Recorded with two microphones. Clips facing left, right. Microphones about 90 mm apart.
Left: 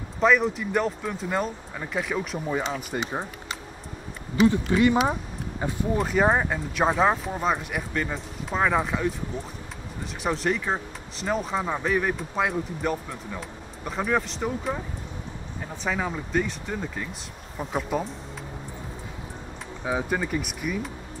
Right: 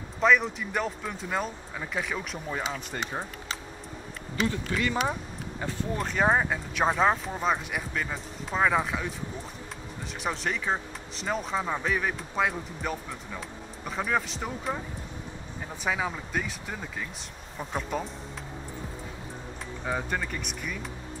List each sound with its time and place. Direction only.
0.2 s speech: centre (ahead or behind)
4.5 s speech: 20° left (ahead or behind)
5.9 s speech: 5° left (ahead or behind)
15.8 s speech: 5° right (ahead or behind)
19.8 s speech: 5° left (ahead or behind)